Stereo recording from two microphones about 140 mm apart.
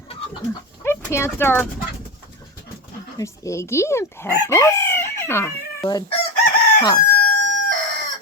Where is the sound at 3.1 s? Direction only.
20° left (ahead or behind).